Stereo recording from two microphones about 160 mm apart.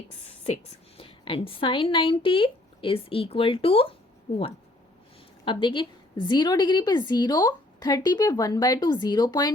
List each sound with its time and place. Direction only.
0.4 s a woman's voice: 40° left (ahead or behind)
5.5 s a woman's voice: 30° left (ahead or behind)